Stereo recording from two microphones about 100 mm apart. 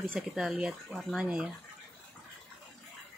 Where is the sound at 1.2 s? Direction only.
10° right (ahead or behind).